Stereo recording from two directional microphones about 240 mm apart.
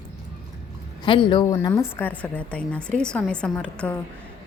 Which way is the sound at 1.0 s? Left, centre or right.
Centre.